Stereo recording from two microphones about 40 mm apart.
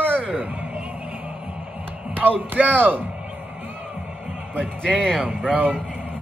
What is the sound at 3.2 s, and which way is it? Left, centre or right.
Music, right.